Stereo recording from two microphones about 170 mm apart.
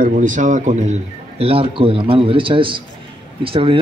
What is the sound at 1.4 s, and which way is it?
A man's voice, 35° right (ahead or behind).